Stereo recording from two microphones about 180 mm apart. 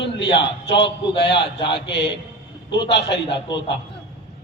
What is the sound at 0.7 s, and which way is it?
A man's voice, 30° left (ahead or behind).